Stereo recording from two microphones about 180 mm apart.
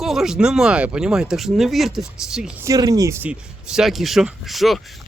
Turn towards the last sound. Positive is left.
turn(degrees=0)  # may be behind; listen again after turning